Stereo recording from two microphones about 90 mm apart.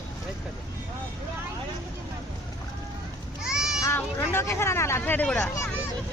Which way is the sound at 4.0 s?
25° left (ahead or behind).